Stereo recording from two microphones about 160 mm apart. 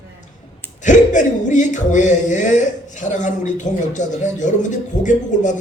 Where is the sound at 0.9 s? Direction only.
50° left (ahead or behind).